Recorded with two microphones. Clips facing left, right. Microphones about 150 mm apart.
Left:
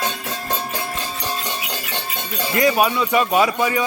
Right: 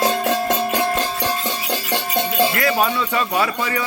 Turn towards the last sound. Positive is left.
turn(degrees=15)  # may be behind; listen again after turning